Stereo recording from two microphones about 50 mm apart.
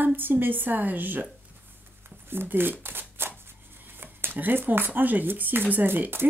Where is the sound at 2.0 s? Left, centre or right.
Right.